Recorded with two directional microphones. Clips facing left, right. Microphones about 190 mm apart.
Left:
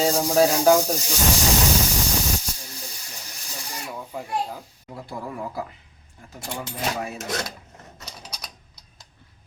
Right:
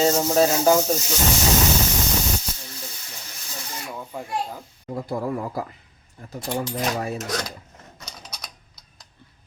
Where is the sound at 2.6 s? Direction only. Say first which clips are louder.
Right 1 dB; 15° left (ahead or behind).